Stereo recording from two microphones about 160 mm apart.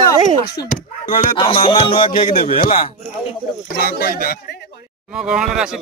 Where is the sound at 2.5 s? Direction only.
60° left (ahead or behind).